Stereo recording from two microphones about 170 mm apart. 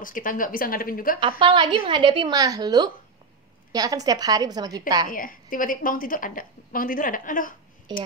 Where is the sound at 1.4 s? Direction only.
30° right (ahead or behind).